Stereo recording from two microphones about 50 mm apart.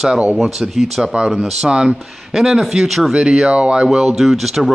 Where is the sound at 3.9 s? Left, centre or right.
Centre.